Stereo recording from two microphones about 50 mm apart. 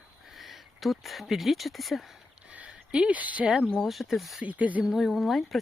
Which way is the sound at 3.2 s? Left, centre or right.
Right.